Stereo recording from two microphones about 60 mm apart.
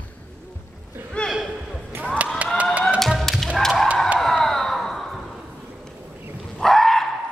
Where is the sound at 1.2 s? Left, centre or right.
Centre.